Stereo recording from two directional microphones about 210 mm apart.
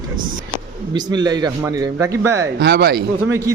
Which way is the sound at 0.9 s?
20° right (ahead or behind).